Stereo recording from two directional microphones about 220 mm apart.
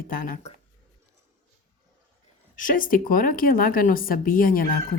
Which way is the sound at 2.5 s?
40° left (ahead or behind).